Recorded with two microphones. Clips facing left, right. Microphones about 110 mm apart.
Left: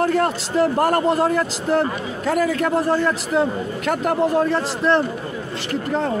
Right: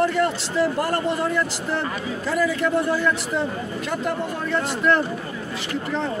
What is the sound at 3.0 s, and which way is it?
Speech, 40° left (ahead or behind).